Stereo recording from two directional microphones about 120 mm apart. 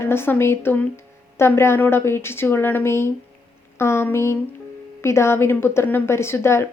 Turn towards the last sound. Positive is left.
turn(degrees=20)  # may be behind; listen again after turning